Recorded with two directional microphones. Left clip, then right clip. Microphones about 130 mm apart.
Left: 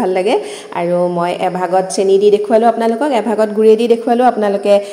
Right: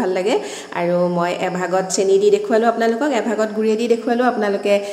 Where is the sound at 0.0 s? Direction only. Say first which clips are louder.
Left 5 dB; 20° left (ahead or behind).